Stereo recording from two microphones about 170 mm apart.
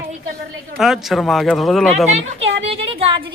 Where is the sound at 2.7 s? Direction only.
30° right (ahead or behind).